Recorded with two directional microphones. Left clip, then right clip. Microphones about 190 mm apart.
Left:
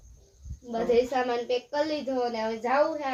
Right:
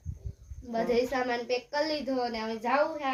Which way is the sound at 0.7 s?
10° left (ahead or behind).